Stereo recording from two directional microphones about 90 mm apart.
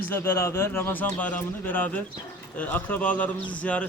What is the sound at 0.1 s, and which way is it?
A man's voice, 25° left (ahead or behind).